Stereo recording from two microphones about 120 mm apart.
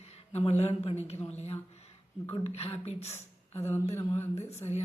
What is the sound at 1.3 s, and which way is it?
A man's voice, 65° left (ahead or behind).